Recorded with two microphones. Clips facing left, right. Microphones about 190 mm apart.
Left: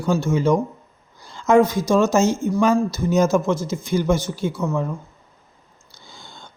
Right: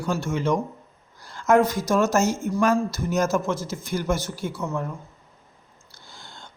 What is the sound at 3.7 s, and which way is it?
Speech, 5° right (ahead or behind).